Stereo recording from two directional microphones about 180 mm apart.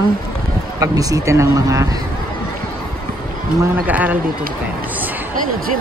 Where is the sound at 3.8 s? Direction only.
10° right (ahead or behind).